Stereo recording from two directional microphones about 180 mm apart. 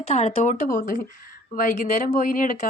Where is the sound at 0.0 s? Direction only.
35° left (ahead or behind).